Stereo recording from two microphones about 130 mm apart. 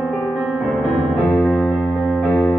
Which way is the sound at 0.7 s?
Centre (ahead or behind).